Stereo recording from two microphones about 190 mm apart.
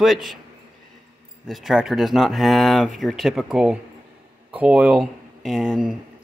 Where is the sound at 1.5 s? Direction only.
Centre (ahead or behind).